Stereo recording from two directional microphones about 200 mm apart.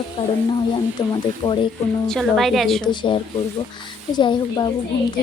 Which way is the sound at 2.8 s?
25° left (ahead or behind).